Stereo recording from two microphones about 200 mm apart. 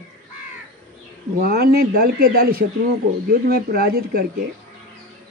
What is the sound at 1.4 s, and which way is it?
Speech, 50° right (ahead or behind).